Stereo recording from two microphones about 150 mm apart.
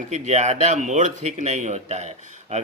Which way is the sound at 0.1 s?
50° right (ahead or behind).